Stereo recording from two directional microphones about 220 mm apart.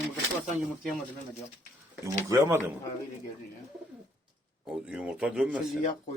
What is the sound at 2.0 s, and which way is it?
Speech, 15° right (ahead or behind).